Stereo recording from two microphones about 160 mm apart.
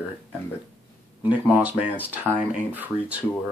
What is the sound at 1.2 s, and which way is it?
Speech, 10° right (ahead or behind).